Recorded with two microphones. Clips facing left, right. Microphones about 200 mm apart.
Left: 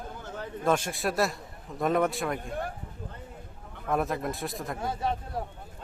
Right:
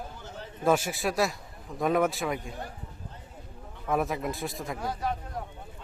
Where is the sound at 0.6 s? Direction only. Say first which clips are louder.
Right 2 dB; 5° right (ahead or behind).